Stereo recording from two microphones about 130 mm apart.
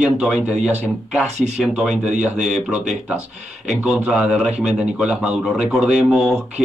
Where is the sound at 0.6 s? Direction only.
55° right (ahead or behind).